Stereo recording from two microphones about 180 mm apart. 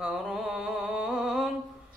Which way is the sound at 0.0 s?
5° right (ahead or behind).